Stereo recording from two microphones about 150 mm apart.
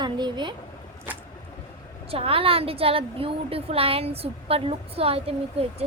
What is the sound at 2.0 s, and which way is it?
A woman's voice, 40° right (ahead or behind).